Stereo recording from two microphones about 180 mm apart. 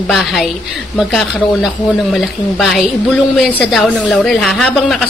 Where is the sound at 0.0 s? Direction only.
Centre (ahead or behind).